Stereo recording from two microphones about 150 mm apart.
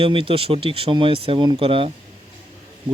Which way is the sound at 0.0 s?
35° right (ahead or behind).